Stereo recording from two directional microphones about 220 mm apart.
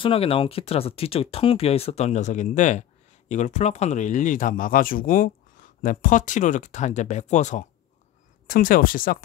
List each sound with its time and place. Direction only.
0.0 s speech: 25° left (ahead or behind); by 9.2 s 40° left (ahead or behind)